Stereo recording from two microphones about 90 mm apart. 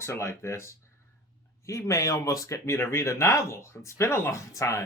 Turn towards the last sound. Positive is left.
turn(degrees=35)  # may be behind; listen again after turning